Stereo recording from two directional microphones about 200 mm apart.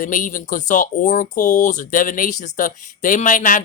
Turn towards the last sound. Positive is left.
turn(degrees=40)  # may be behind; listen again after turning